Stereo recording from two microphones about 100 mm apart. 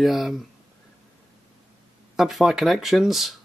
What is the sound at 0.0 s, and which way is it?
Speech, centre (ahead or behind).